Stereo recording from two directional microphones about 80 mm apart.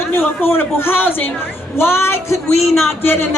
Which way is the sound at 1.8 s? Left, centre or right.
Left.